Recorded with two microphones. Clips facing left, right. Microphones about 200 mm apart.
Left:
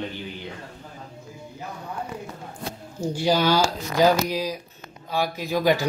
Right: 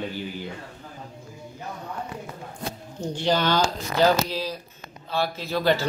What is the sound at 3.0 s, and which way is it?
Speech, 10° left (ahead or behind).